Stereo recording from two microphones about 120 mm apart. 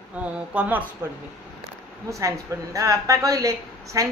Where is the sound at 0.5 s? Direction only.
10° right (ahead or behind).